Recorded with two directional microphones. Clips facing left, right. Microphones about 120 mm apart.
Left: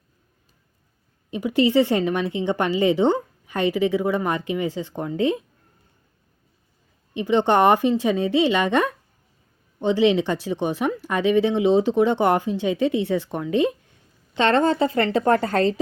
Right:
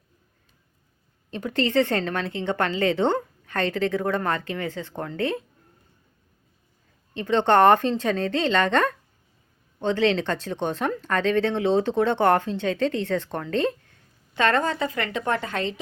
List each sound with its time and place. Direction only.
1.3 s a woman's voice: 10° left (ahead or behind)
7.1 s a woman's voice: 15° left (ahead or behind)
14.3 s a woman's voice: 25° left (ahead or behind)